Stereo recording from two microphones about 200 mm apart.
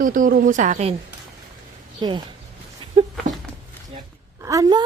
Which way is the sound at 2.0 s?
20° right (ahead or behind).